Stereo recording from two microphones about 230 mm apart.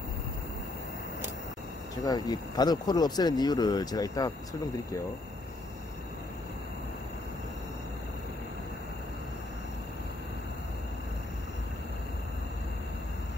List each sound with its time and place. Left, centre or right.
2.0 s speech: centre